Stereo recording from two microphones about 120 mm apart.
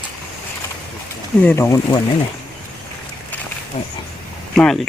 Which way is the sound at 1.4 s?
20° left (ahead or behind).